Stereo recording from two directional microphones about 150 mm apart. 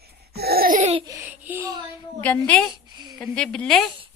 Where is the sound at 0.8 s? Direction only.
40° right (ahead or behind).